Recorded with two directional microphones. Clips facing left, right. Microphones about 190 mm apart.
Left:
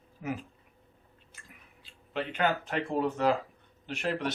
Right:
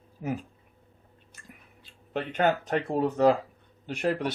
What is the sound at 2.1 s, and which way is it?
Speech, 45° right (ahead or behind).